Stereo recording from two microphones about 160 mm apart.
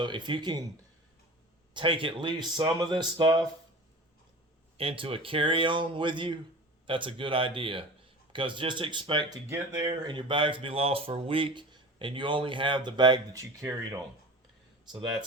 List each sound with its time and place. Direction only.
0.0 s speech: 30° right (ahead or behind)
1.7 s speech: 30° right (ahead or behind)
4.8 s speech: 35° right (ahead or behind); by 14.0 s 20° right (ahead or behind)